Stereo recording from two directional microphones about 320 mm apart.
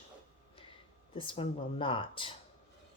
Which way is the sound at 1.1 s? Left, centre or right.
Centre.